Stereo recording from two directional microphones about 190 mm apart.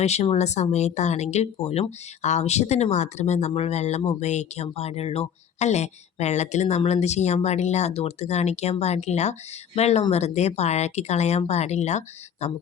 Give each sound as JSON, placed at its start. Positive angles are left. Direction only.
{"t": 0.0, "sound": "speech", "side_deg": 35}